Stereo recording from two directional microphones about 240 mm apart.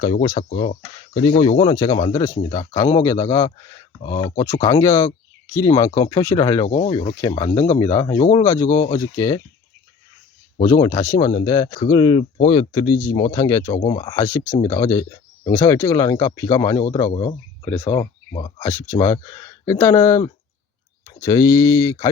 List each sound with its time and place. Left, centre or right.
0.0 s speech: centre
6.7 s speech: left
10.6 s speech: centre
18.6 s speech: centre